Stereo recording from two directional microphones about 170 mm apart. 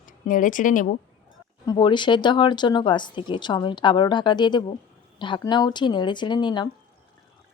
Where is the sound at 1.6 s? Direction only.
25° left (ahead or behind).